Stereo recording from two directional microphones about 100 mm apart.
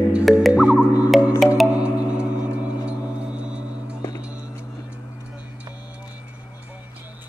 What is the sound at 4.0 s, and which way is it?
Music, 40° left (ahead or behind).